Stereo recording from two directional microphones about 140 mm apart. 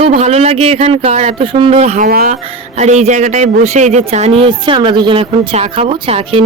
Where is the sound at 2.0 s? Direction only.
90° right.